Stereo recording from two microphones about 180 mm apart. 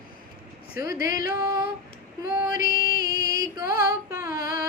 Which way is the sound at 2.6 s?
55° left (ahead or behind).